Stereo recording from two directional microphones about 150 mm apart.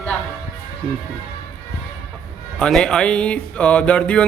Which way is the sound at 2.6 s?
5° left (ahead or behind).